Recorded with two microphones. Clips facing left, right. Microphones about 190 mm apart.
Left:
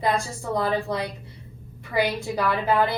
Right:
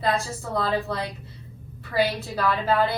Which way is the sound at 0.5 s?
15° left (ahead or behind).